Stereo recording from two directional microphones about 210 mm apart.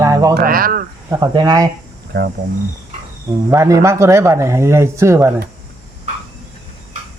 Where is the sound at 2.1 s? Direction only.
55° right (ahead or behind).